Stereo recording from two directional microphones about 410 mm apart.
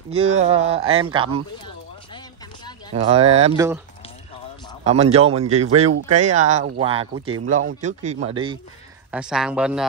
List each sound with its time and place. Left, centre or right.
0.1 s speech: centre
2.9 s speech: centre
4.8 s speech: centre
5.9 s speech: right
6.3 s speech: centre
9.1 s speech: centre